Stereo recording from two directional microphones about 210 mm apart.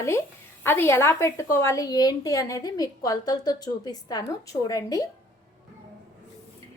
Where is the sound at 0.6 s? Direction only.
10° left (ahead or behind).